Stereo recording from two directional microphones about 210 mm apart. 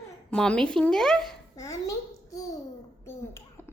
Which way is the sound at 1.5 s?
15° left (ahead or behind).